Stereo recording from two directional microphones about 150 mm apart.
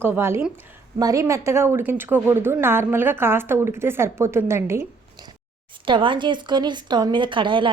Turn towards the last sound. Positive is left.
turn(degrees=-35)  # may be behind; listen again after turning